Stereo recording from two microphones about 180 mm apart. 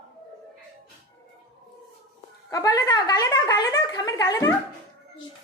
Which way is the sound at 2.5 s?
20° left (ahead or behind).